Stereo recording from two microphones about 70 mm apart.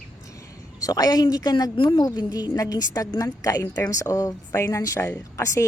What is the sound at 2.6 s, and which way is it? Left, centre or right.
A woman's voice, left.